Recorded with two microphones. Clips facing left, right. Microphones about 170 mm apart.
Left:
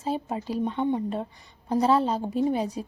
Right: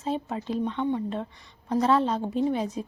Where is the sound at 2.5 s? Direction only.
35° left (ahead or behind).